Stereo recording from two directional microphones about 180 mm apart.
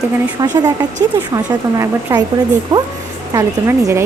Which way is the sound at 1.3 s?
20° right (ahead or behind).